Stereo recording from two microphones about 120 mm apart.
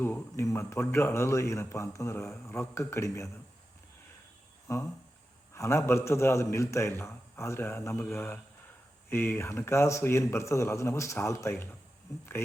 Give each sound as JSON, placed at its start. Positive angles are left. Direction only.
{"t": 0.0, "sound": "speech", "side_deg": 15}
{"t": 4.7, "sound": "speech", "side_deg": 25}